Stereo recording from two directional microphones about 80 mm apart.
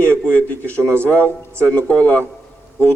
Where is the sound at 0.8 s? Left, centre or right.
Right.